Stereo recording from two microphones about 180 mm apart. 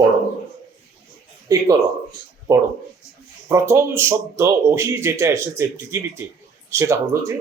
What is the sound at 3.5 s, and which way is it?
Speech, 15° right (ahead or behind).